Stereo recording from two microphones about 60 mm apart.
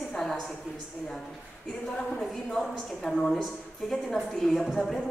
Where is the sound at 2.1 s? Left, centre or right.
Centre.